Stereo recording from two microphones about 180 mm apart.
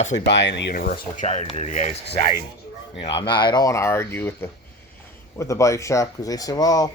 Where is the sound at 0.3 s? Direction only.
75° left (ahead or behind); by 1.9 s 40° left (ahead or behind).